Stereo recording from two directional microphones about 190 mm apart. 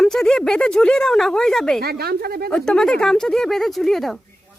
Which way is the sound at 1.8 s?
55° right (ahead or behind).